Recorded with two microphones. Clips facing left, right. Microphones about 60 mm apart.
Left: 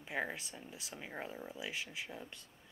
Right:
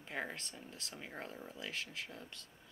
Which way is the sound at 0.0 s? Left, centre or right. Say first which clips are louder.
Left 3 dB; centre.